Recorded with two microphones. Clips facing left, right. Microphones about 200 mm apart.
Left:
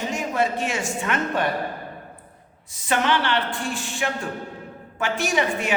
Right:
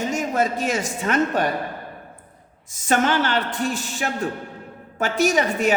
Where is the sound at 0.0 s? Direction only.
45° right (ahead or behind).